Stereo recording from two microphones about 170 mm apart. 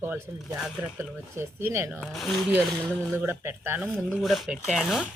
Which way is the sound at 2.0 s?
Centre (ahead or behind).